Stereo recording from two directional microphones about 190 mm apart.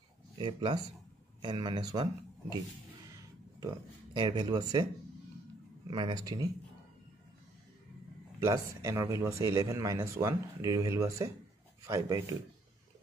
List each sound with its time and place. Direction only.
0.4 s speech: 25° right (ahead or behind)
3.6 s speech: 25° right (ahead or behind)
5.9 s speech: 25° right (ahead or behind)
8.4 s speech: 15° right (ahead or behind)